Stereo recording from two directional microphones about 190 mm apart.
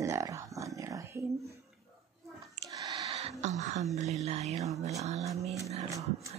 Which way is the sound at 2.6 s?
20° right (ahead or behind).